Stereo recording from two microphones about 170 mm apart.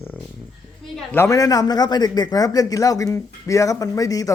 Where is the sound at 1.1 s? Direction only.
15° left (ahead or behind).